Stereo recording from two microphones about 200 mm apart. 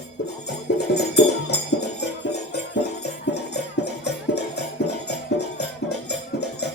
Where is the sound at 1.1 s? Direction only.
55° left (ahead or behind).